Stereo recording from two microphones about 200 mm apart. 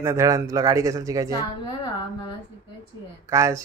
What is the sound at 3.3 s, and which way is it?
Speech, 15° right (ahead or behind).